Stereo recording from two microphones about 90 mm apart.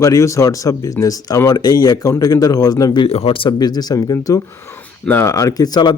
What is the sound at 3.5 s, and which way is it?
Speech, 50° left (ahead or behind).